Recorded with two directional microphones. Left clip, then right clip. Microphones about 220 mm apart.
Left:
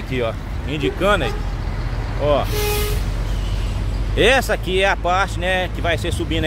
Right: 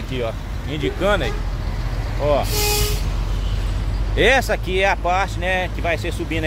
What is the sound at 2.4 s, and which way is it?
Vehicle, 55° right (ahead or behind).